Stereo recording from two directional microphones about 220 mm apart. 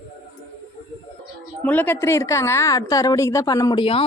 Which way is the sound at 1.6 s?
10° left (ahead or behind).